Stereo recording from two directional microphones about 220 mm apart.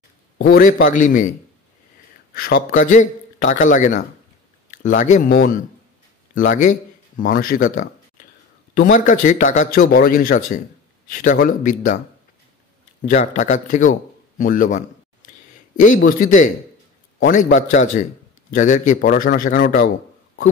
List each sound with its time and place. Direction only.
0.4 s speech: 40° left (ahead or behind)
2.3 s speech: 40° left (ahead or behind)
13.0 s a man's voice: 35° left (ahead or behind)